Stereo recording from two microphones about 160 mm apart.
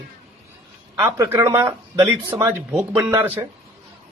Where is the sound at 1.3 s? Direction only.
20° right (ahead or behind).